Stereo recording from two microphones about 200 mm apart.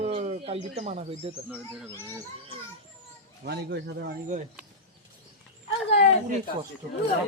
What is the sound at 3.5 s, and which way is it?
Speech, 55° right (ahead or behind).